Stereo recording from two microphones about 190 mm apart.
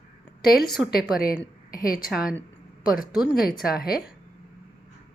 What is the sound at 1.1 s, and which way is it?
Speech, 50° left (ahead or behind).